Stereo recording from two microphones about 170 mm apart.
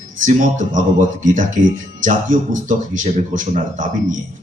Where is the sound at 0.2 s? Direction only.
50° right (ahead or behind).